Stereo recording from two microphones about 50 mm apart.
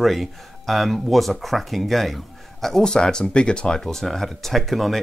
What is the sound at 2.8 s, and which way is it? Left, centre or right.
Speech, centre.